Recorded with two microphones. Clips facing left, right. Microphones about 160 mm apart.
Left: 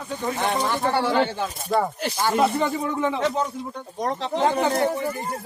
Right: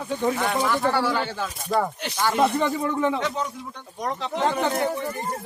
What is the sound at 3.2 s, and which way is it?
Speech, 35° left (ahead or behind).